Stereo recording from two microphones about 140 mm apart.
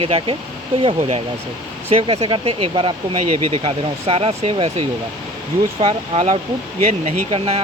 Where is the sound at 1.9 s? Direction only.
45° right (ahead or behind).